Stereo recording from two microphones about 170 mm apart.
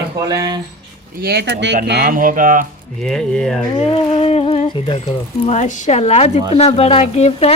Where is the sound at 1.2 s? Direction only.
70° right (ahead or behind).